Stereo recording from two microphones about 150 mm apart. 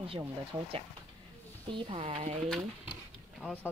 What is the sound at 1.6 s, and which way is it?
Speech, 35° right (ahead or behind).